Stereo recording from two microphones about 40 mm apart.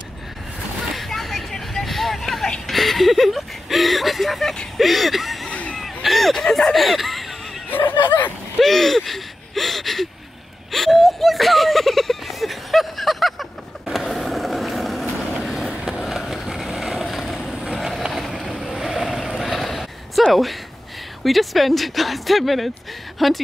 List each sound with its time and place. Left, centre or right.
0.9 s vehicle: centre
2.6 s speech: centre
5.5 s a sound: left
5.8 s a sound: centre
6.7 s speech: centre
7.7 s speech: left
8.5 s speech: centre
10.7 s a sound: centre
15.7 s skateboard: right
16.1 s vehicle: centre
21.2 s speech: centre